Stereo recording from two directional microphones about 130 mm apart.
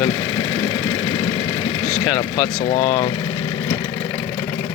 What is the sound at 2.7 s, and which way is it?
Speech, 65° left (ahead or behind).